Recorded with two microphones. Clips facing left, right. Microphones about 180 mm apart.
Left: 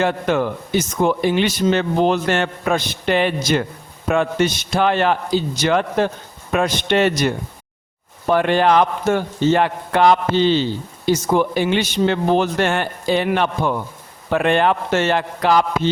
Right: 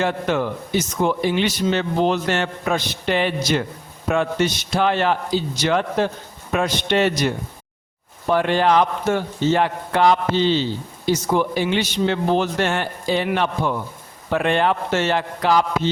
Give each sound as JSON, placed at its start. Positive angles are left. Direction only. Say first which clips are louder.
{"t": 0.0, "sound": "a man's voice", "louder": "left 2 dB", "side_deg": 55}